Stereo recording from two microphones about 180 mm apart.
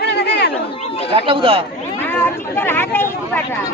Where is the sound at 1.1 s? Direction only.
30° right (ahead or behind).